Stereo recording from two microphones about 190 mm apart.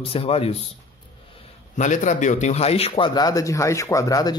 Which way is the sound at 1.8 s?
40° left (ahead or behind).